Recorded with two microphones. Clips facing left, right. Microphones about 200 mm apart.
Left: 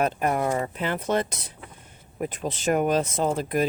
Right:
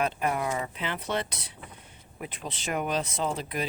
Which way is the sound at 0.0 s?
45° left (ahead or behind).